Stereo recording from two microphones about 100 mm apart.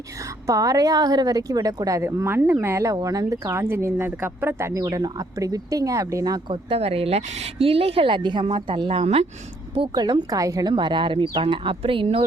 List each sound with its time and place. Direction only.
0.4 s a woman's voice: 35° right (ahead or behind)
4.7 s a woman's voice: 35° right (ahead or behind)
6.5 s a woman's voice: 80° right
9.9 s a woman's voice: 45° right (ahead or behind); by 12.2 s 65° right (ahead or behind)